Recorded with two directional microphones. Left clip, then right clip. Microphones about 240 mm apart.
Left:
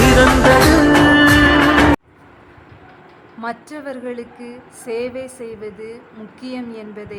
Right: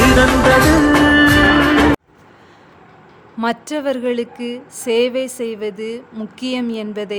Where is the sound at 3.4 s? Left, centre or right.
Right.